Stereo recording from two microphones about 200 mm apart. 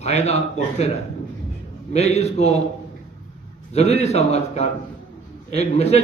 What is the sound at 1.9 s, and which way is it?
Speech, 35° left (ahead or behind).